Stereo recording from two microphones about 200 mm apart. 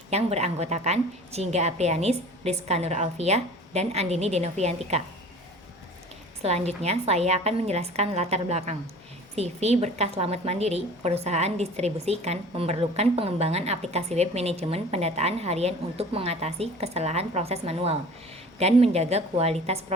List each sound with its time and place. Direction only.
0.1 s a woman's voice: 30° right (ahead or behind)
6.4 s a woman's voice: 30° right (ahead or behind)